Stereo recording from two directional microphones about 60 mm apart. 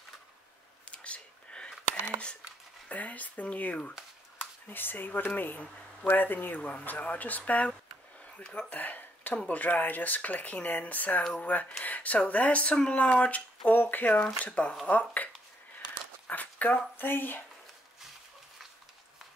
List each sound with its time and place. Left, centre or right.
0.9 s whispering: centre
2.9 s speech: left
8.5 s speech: centre
8.7 s a sound: left
9.5 s speech: left
16.3 s a sound: left